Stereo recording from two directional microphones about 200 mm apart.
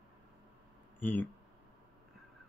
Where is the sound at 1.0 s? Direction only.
10° left (ahead or behind).